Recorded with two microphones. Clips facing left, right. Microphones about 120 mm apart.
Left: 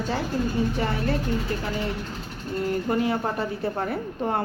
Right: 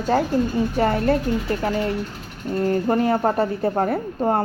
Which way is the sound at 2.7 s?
40° right (ahead or behind).